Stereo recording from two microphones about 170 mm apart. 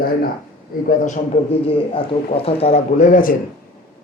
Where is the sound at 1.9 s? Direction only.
35° left (ahead or behind); by 3.3 s 50° left (ahead or behind).